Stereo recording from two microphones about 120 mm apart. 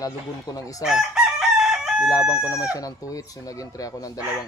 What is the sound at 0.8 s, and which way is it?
Chicken, 5° right (ahead or behind).